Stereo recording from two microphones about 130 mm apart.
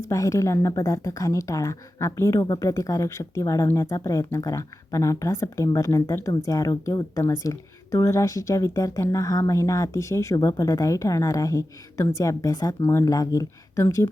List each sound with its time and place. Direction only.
0.1 s speech: 25° left (ahead or behind)